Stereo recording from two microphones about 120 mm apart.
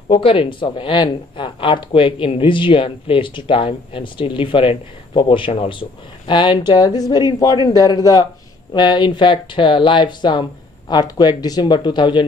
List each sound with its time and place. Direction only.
0.1 s speech: 50° left (ahead or behind)